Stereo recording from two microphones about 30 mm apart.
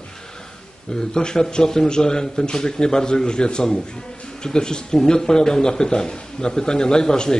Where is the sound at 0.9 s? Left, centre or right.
Left.